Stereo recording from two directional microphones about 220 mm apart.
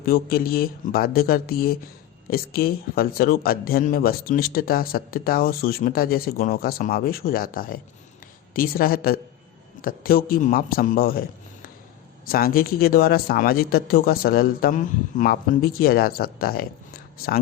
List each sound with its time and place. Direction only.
0.0 s a man's voice: 45° left (ahead or behind)
12.3 s speech: 40° left (ahead or behind)